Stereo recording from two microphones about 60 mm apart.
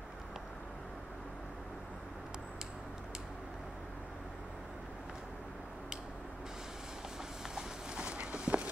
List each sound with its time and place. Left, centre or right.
7.5 s clip-clop: centre